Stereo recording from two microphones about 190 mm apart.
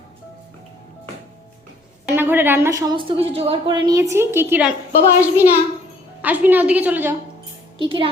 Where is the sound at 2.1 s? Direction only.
10° right (ahead or behind).